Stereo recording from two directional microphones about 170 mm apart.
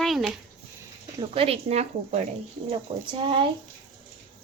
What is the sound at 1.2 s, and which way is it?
A woman's voice, 35° right (ahead or behind).